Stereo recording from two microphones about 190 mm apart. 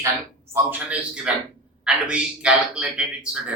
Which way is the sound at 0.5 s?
5° right (ahead or behind).